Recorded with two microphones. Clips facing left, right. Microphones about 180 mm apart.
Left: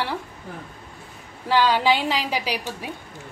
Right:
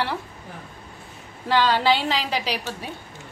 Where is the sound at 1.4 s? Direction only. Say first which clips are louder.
Left 1 dB; 10° left (ahead or behind).